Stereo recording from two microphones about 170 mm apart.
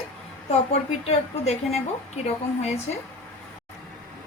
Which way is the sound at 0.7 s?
40° left (ahead or behind).